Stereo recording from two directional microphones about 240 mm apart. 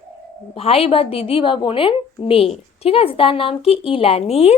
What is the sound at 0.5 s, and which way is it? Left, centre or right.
A woman's voice, left.